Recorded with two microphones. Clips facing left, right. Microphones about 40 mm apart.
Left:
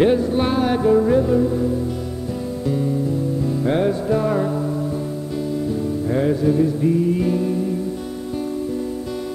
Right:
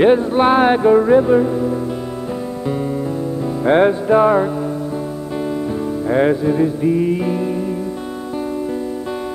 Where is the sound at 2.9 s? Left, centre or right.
Right.